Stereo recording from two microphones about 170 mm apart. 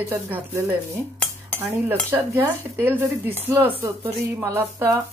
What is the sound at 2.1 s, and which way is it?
Speech, 10° right (ahead or behind).